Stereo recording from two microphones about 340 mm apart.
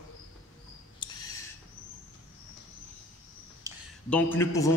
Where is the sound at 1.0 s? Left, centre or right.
Centre.